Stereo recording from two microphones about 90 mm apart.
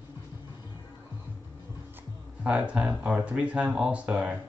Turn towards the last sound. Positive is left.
turn(degrees=-15)  # may be behind; listen again after turning